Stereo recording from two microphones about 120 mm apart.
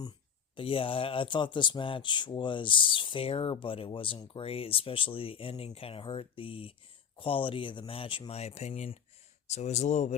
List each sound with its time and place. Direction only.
0.5 s speech: 45° left (ahead or behind); by 10.2 s 80° left